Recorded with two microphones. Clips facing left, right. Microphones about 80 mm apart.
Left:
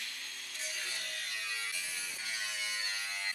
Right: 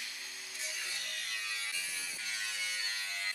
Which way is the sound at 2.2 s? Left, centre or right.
Centre.